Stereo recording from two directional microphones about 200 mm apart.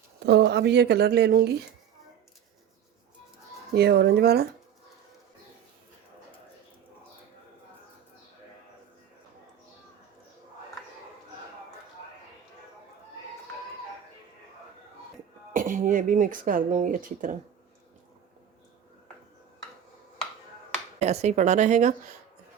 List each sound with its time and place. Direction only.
0.3 s a woman's voice: 55° right (ahead or behind)
3.8 s speech: 55° right (ahead or behind)
15.5 s speech: 40° right (ahead or behind)
21.0 s a woman's voice: 35° right (ahead or behind)